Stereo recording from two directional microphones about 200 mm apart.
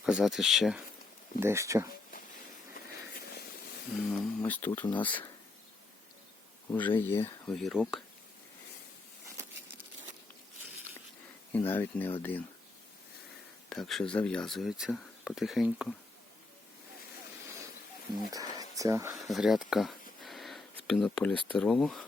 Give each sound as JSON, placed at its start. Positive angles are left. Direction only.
{"t": 0.0, "sound": "speech", "side_deg": 0}
{"t": 1.4, "sound": "speech", "side_deg": -15}
{"t": 4.1, "sound": "speech", "side_deg": 5}
{"t": 6.7, "sound": "speech", "side_deg": 10}
{"t": 11.5, "sound": "speech", "side_deg": 10}
{"t": 13.7, "sound": "speech", "side_deg": 0}
{"t": 18.3, "sound": "speech", "side_deg": -20}
{"t": 19.1, "sound": "speech", "side_deg": 0}